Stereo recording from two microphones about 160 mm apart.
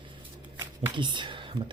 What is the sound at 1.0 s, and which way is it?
Speech, 30° right (ahead or behind).